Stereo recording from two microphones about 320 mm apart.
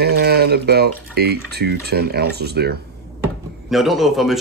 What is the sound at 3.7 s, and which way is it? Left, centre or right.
Speech, centre.